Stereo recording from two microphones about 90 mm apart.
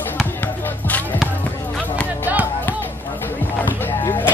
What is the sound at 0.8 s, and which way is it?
Music, 20° left (ahead or behind).